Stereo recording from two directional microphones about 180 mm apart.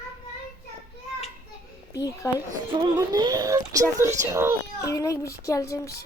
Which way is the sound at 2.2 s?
15° left (ahead or behind).